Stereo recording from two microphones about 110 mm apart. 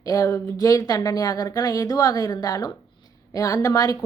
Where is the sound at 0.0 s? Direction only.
30° left (ahead or behind).